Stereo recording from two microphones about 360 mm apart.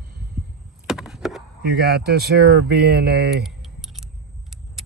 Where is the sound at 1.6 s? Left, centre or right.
Right.